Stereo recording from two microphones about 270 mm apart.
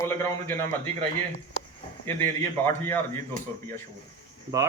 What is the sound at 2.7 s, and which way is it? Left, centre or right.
Speech, centre.